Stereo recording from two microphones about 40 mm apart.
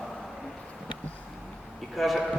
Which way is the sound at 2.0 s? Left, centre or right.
Centre.